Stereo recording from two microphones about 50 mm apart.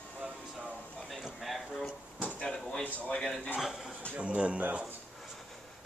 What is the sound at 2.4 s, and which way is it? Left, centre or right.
Drawer open or close, centre.